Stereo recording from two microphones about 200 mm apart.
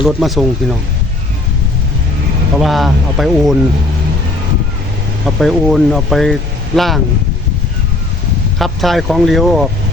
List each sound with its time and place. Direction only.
0.0 s speech: centre (ahead or behind)
2.6 s speech: centre (ahead or behind)
5.4 s speech: centre (ahead or behind)
8.5 s speech: centre (ahead or behind)